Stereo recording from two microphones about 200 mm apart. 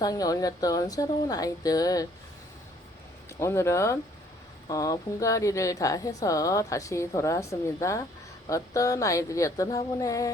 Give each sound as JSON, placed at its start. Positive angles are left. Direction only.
{"t": 0.0, "sound": "a woman's voice", "side_deg": 20}
{"t": 3.3, "sound": "a woman's voice", "side_deg": 15}